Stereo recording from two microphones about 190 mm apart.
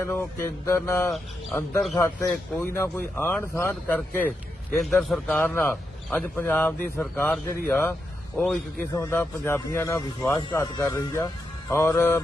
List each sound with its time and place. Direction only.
0.0 s a man's voice: 10° left (ahead or behind)